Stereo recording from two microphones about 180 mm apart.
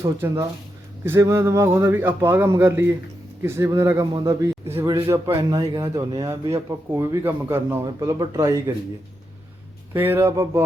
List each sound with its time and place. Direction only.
0.0 s speech: 20° right (ahead or behind)
9.9 s speech: 10° right (ahead or behind)